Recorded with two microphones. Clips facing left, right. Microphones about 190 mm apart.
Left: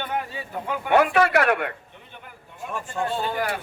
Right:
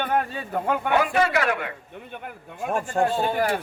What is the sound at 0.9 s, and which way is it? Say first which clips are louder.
Speech: left 4 dB; 60° left (ahead or behind).